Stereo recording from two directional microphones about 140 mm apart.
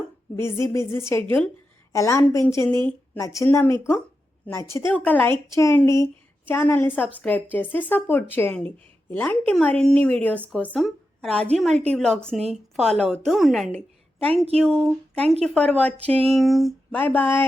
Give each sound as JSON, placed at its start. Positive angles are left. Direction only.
{"t": 0.3, "sound": "a woman's voice", "side_deg": 20}
{"t": 13.7, "sound": "a sound", "side_deg": 10}
{"t": 15.1, "sound": "a woman's voice", "side_deg": 5}
{"t": 16.9, "sound": "speech", "side_deg": 10}